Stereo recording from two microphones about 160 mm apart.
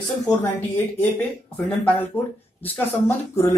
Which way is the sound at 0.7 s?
10° left (ahead or behind).